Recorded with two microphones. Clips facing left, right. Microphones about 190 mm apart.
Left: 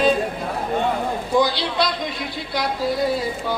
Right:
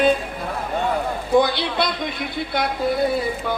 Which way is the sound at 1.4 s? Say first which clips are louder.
Left 1 dB; 55° right (ahead or behind).